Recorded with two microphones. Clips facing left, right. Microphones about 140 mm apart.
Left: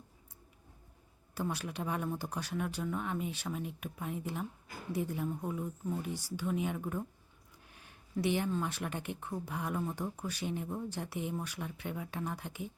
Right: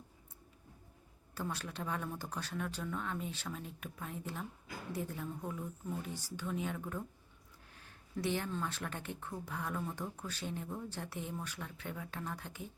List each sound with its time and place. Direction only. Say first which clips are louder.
1.4 s speech: left 4 dB; 15° left (ahead or behind)